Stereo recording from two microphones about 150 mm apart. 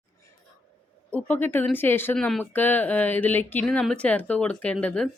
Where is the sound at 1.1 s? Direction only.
10° left (ahead or behind).